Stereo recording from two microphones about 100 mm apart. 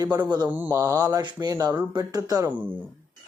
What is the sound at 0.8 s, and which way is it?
Speech, 35° right (ahead or behind).